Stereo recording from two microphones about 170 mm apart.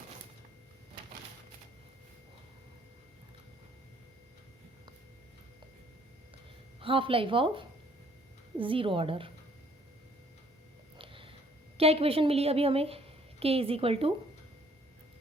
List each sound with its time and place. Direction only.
6.7 s a woman's voice: 30° right (ahead or behind)
10.9 s a sound: 30° right (ahead or behind)
11.8 s a woman's voice: 35° right (ahead or behind)